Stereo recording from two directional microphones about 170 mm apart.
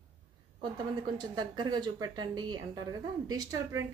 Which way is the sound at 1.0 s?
25° right (ahead or behind).